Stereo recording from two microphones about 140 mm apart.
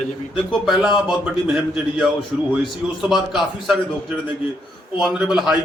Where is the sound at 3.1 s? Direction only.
Centre (ahead or behind).